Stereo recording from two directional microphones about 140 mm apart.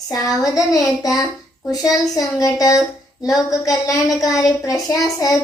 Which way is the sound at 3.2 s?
5° right (ahead or behind).